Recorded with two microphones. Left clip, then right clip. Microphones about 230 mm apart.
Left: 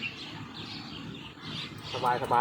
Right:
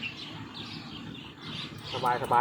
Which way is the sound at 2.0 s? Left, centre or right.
Centre.